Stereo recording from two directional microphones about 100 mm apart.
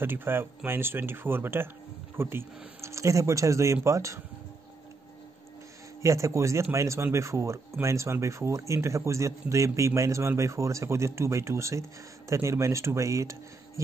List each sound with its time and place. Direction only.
0.0 s speech: 20° right (ahead or behind)
6.0 s speech: 30° right (ahead or behind)